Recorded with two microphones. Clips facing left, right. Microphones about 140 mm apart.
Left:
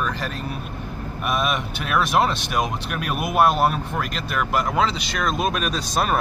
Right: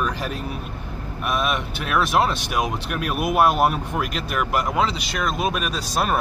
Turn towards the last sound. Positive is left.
turn(degrees=-5)  # may be behind; listen again after turning